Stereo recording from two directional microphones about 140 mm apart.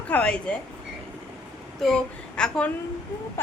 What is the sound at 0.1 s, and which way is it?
Speech, 10° left (ahead or behind).